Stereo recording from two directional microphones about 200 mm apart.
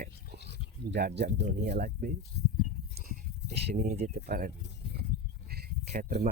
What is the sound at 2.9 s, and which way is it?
Sheep, 55° right (ahead or behind).